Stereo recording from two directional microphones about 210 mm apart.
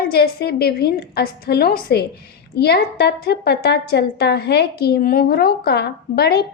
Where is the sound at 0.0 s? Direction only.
50° left (ahead or behind).